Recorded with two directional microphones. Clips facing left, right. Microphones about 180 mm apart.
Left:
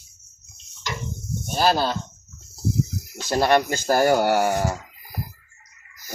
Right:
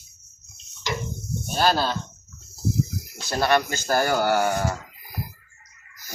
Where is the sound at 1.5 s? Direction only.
10° left (ahead or behind).